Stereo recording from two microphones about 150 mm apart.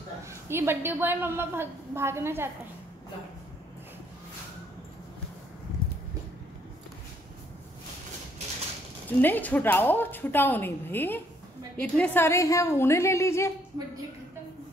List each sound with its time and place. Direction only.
0.3 s a woman's voice: 15° right (ahead or behind)
9.2 s a woman's voice: 10° left (ahead or behind)